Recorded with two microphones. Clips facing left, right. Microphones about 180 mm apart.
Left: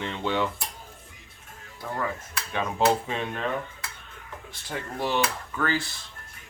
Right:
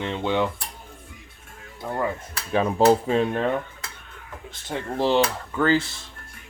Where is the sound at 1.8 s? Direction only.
15° right (ahead or behind).